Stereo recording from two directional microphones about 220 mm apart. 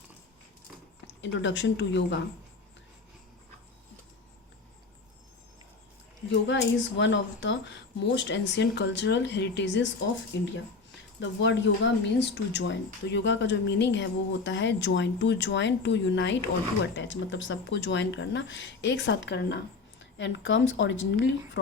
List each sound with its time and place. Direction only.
1.2 s speech: 55° left (ahead or behind)
6.5 s speech: 55° left (ahead or behind)